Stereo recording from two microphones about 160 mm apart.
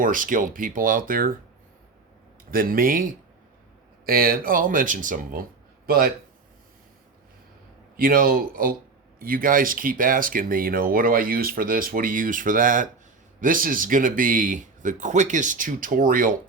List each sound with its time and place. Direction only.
0.0 s speech: 60° right (ahead or behind)
2.5 s speech: 65° right (ahead or behind)
7.9 s speech: 60° right (ahead or behind)